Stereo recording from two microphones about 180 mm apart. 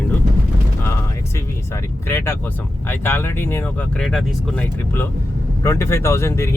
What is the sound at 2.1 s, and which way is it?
Speech, 15° left (ahead or behind).